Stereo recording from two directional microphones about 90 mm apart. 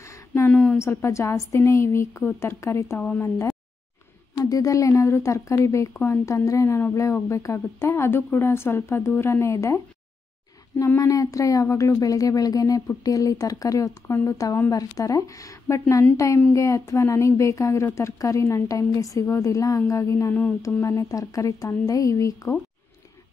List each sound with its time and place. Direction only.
0.0 s a sound: 30° left (ahead or behind)
0.5 s a woman's voice: 15° left (ahead or behind)
0.7 s a woman's voice: 30° left (ahead or behind)
3.0 s speech: 15° left (ahead or behind)
4.5 s a woman's voice: 40° left (ahead or behind)
11.0 s a woman's voice: 35° left (ahead or behind)